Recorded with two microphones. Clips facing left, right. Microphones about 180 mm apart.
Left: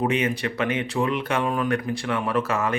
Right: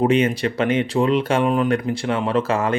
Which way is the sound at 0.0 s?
30° right (ahead or behind).